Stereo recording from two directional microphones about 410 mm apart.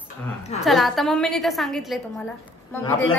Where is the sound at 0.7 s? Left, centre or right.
Centre.